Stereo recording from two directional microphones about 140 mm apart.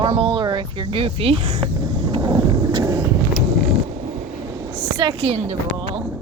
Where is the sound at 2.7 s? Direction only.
30° right (ahead or behind).